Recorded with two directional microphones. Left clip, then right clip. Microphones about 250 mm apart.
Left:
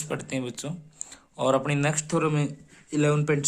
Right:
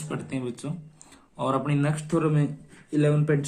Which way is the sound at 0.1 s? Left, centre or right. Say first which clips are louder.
Left 1 dB; left.